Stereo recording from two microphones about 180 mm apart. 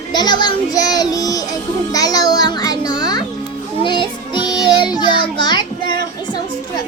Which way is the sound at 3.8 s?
25° left (ahead or behind).